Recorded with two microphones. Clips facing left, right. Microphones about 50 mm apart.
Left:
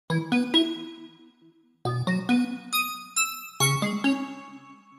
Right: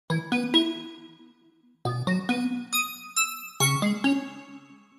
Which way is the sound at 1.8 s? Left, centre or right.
Centre.